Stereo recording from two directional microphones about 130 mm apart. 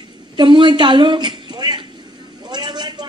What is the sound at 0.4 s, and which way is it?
A woman's voice, 40° right (ahead or behind).